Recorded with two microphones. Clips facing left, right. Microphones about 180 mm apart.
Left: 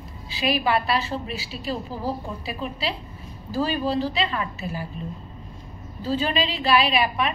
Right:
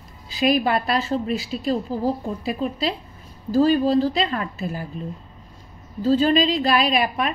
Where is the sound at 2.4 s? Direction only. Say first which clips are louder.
Right 6 dB; 45° right (ahead or behind).